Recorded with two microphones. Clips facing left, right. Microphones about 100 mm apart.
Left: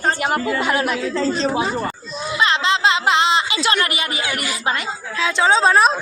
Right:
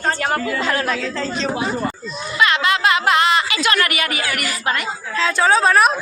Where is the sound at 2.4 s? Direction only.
25° left (ahead or behind).